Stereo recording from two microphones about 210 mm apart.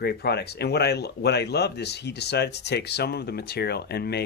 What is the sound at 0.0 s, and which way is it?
Speech, 50° left (ahead or behind).